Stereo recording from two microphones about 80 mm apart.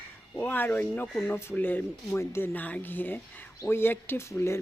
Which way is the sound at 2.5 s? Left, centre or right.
Left.